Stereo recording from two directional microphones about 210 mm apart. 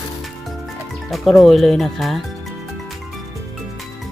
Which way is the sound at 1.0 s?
Centre (ahead or behind).